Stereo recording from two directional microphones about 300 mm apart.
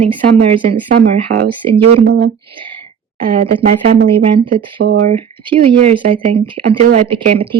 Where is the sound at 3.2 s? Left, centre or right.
Right.